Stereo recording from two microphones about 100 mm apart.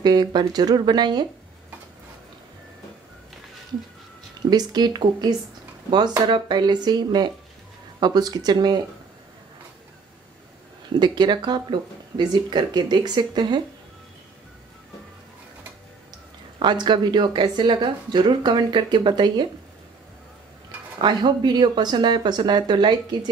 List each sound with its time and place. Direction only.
0.0 s a woman's voice: 45° right (ahead or behind)
4.5 s a woman's voice: 45° right (ahead or behind)
11.0 s a woman's voice: 50° right (ahead or behind)
16.5 s a woman's voice: 50° right (ahead or behind)
21.0 s a woman's voice: 50° right (ahead or behind)